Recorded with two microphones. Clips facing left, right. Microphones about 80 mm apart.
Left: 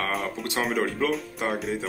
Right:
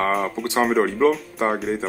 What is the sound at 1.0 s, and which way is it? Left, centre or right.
Speech, right.